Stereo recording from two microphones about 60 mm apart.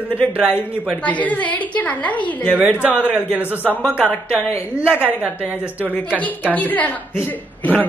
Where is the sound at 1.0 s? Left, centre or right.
Left.